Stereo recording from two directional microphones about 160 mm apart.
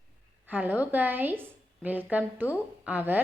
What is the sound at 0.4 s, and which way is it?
A woman's voice, 10° right (ahead or behind).